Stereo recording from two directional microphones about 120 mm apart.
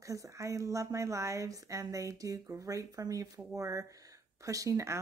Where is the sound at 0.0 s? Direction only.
25° right (ahead or behind).